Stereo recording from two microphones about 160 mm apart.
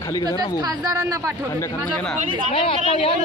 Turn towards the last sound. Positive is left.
turn(degrees=35)  # may be behind; listen again after turning